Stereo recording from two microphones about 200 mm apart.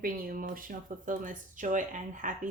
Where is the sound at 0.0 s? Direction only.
45° right (ahead or behind).